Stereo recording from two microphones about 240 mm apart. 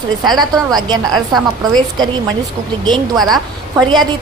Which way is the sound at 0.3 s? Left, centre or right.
Centre.